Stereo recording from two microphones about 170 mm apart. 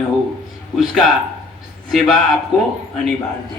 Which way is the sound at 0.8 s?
Centre (ahead or behind).